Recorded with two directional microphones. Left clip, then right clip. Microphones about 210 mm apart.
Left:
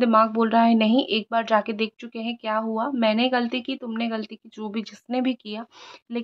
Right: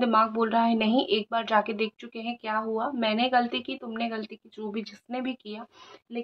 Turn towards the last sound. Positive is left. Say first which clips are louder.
# left 6 dB
turn(degrees=45)  # may be behind; listen again after turning